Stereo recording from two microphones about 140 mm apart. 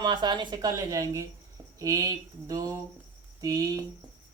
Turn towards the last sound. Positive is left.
turn(degrees=-25)  # may be behind; listen again after turning